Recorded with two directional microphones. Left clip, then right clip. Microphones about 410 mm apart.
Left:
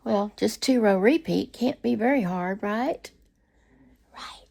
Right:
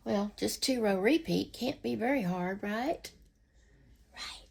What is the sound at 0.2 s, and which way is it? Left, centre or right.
Speech, left.